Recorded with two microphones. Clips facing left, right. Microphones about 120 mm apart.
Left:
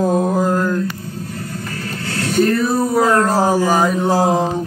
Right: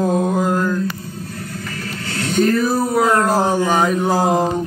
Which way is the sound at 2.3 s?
Centre (ahead or behind).